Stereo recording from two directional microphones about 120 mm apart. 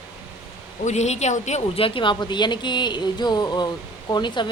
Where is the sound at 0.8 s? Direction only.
70° left (ahead or behind).